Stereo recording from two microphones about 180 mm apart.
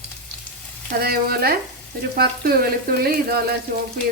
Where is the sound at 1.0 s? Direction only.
60° right (ahead or behind).